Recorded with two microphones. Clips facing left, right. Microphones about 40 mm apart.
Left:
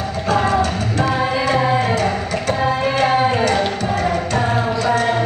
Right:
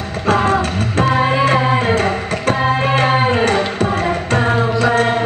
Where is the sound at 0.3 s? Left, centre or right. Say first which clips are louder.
Right 2 dB; right.